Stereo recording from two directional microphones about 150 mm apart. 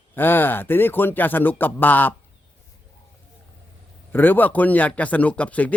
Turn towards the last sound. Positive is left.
turn(degrees=10)  # may be behind; listen again after turning